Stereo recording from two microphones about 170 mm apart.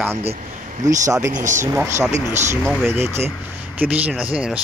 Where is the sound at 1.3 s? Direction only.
50° right (ahead or behind).